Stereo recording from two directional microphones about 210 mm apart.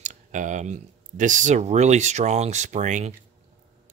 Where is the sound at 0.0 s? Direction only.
35° right (ahead or behind).